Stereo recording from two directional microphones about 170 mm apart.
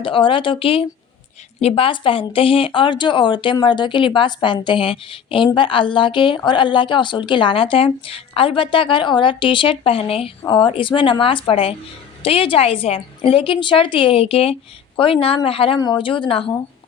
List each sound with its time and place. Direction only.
0.0 s a woman's voice: 30° left (ahead or behind)